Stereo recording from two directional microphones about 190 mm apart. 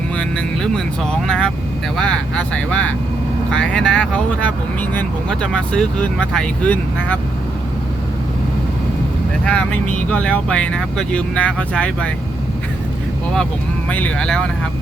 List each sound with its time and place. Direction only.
0.2 s speech: 5° left (ahead or behind)
9.4 s speech: 5° left (ahead or behind)
13.9 s speech: 5° left (ahead or behind)